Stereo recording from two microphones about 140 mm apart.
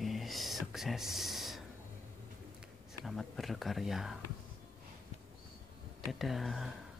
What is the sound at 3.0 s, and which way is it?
Speech, centre (ahead or behind).